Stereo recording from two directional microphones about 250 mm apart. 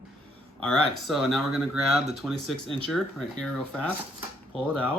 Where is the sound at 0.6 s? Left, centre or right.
Centre.